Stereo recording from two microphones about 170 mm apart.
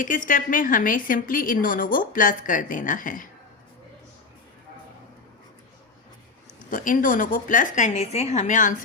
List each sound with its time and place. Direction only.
0.0 s a woman's voice: 50° left (ahead or behind)
6.7 s a woman's voice: 50° left (ahead or behind)